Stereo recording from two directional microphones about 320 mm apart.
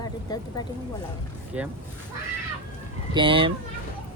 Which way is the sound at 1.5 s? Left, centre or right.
Centre.